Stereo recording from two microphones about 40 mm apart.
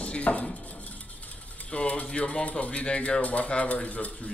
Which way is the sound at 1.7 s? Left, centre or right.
Left.